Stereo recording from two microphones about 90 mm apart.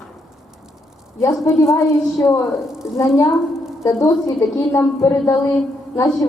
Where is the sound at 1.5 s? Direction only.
30° left (ahead or behind).